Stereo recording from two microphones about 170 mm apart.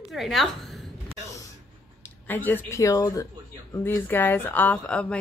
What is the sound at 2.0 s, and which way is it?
A woman's voice, 10° left (ahead or behind).